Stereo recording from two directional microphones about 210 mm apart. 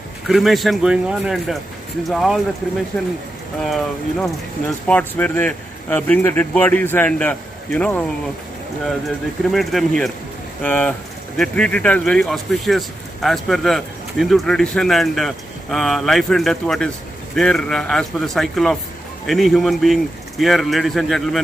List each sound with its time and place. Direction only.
0.3 s speech: centre (ahead or behind)
3.6 s speech: centre (ahead or behind)
9.5 s speech: centre (ahead or behind)